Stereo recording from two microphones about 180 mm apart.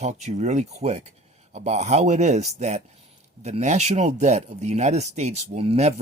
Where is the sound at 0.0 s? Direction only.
40° right (ahead or behind).